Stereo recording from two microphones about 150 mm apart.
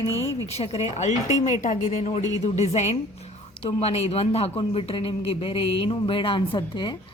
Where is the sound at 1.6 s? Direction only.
55° left (ahead or behind); by 6.9 s 30° left (ahead or behind).